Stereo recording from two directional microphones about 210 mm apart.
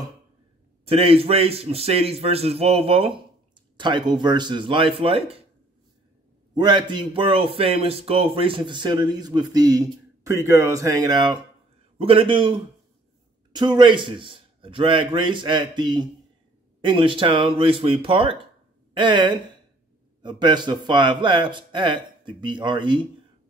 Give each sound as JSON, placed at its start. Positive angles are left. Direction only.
{"t": 0.8, "sound": "speech", "side_deg": -25}
{"t": 6.5, "sound": "speech", "side_deg": -20}